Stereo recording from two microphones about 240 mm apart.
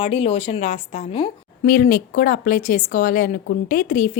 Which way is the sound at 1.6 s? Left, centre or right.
Left.